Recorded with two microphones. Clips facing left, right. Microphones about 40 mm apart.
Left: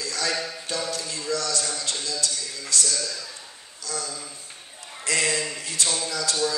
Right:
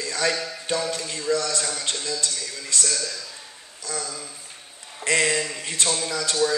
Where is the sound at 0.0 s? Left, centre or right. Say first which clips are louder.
Right 3 dB; right.